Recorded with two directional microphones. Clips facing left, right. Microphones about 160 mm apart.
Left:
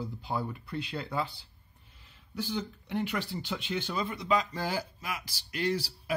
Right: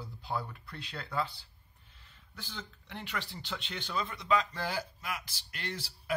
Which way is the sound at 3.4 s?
5° left (ahead or behind).